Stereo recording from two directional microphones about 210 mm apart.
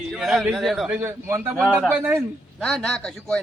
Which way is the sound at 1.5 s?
5° left (ahead or behind).